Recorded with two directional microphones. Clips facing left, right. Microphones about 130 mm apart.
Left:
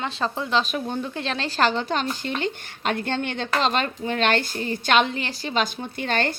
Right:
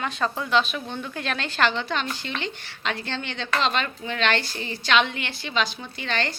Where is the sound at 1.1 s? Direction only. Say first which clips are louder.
Left 2 dB; 30° left (ahead or behind).